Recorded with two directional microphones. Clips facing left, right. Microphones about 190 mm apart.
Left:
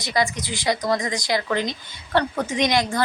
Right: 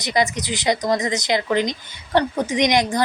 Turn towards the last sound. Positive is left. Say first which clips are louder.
# right 3 dB
turn(degrees=-20)  # may be behind; listen again after turning